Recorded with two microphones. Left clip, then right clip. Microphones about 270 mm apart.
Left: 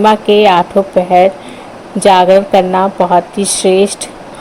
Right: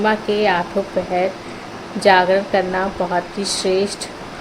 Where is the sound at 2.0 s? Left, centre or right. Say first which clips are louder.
Left 7 dB; left.